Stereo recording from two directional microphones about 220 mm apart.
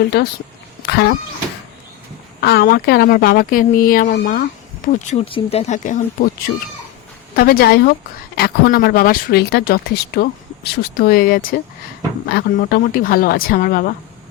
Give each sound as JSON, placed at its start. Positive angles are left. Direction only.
{"t": 0.1, "sound": "speech", "side_deg": 50}
{"t": 0.9, "sound": "vehicle", "side_deg": 50}
{"t": 2.4, "sound": "speech", "side_deg": 45}
{"t": 4.9, "sound": "speech", "side_deg": 25}
{"t": 7.3, "sound": "speech", "side_deg": 45}